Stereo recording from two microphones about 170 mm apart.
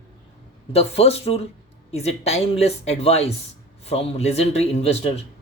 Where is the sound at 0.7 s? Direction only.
35° left (ahead or behind).